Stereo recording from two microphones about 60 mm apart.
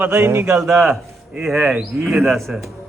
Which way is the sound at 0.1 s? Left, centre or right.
Right.